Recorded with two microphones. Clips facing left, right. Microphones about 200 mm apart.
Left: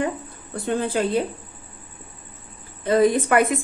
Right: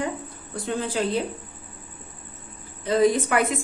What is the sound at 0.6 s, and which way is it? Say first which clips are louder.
Speech: left 3 dB; 60° left (ahead or behind).